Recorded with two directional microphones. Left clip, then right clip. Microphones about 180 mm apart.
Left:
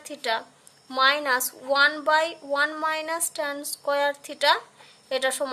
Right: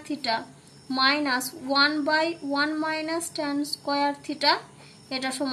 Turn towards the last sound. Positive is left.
turn(degrees=45)  # may be behind; listen again after turning